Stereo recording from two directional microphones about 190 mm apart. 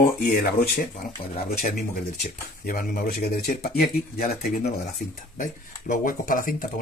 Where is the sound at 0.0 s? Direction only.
45° left (ahead or behind).